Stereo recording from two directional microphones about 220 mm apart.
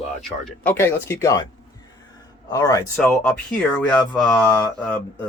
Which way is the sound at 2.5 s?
15° left (ahead or behind).